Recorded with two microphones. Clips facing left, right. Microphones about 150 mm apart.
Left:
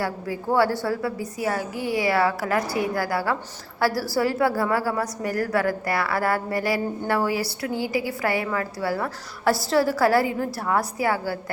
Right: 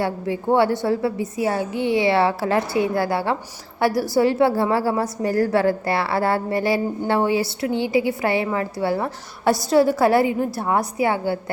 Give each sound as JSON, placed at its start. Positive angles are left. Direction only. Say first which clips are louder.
{"t": 0.0, "sound": "a woman's voice", "louder": "right 4 dB", "side_deg": -25}